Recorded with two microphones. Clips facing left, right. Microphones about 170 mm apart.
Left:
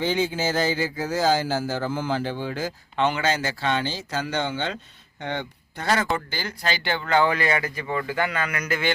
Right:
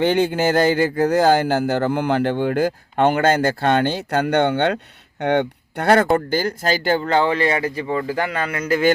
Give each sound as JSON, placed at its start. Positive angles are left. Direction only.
{"t": 0.0, "sound": "speech", "side_deg": -60}
{"t": 6.1, "sound": "speech", "side_deg": -50}